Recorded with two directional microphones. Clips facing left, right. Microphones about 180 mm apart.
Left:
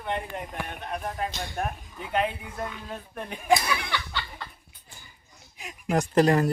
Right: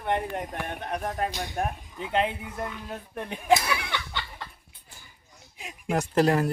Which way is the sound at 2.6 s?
5° right (ahead or behind).